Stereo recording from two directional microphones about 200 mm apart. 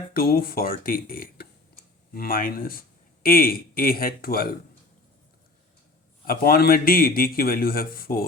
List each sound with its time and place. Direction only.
0.1 s a man's voice: 50° left (ahead or behind)
6.2 s a man's voice: 50° left (ahead or behind)